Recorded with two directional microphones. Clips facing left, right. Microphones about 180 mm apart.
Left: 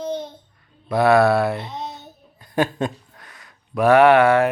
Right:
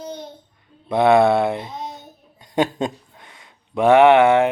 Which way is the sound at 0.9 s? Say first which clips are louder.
Right 1 dB; 20° right (ahead or behind).